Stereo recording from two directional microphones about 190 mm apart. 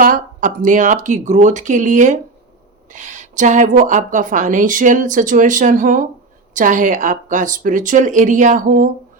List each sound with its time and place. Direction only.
0.0 s a woman's voice: 45° right (ahead or behind)